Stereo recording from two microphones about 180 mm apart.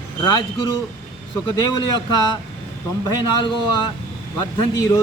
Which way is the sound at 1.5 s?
25° left (ahead or behind).